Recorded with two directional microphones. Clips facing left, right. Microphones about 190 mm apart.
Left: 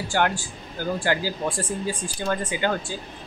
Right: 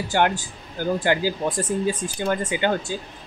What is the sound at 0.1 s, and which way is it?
A man's voice, 20° right (ahead or behind).